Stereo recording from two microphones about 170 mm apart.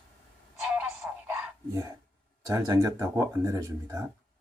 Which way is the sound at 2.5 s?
20° right (ahead or behind).